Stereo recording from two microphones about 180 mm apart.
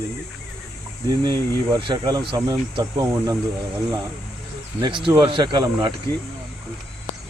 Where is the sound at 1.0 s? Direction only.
25° right (ahead or behind).